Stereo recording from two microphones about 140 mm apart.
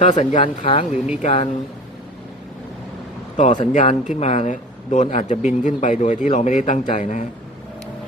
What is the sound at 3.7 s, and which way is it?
Speech, 60° left (ahead or behind).